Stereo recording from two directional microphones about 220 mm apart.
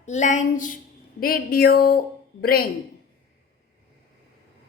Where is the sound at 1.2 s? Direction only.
40° left (ahead or behind).